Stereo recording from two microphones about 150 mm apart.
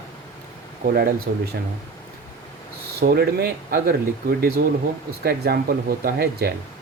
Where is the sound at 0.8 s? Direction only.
90° right.